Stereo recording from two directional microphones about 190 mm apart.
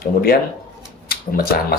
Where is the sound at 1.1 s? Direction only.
50° left (ahead or behind).